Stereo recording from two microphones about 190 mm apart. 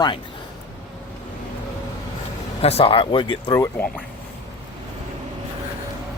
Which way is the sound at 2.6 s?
30° left (ahead or behind).